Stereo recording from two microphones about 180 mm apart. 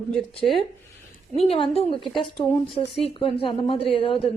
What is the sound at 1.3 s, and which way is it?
Speech, 35° left (ahead or behind).